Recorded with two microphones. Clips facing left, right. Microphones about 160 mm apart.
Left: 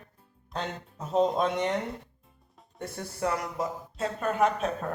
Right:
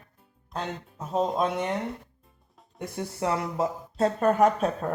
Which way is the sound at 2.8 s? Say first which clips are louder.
Right 2 dB; 20° right (ahead or behind).